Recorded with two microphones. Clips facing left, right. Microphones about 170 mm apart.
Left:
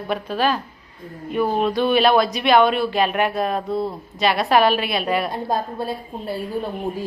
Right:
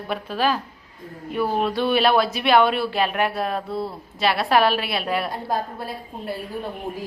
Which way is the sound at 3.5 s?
20° left (ahead or behind).